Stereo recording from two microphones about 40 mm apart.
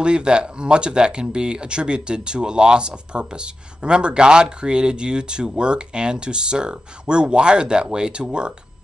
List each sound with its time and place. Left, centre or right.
0.0 s speech: right